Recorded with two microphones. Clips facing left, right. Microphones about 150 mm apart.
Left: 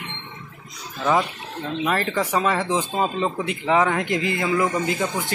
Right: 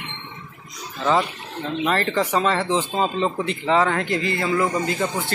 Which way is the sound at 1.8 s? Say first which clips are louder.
Right 2 dB; 10° left (ahead or behind).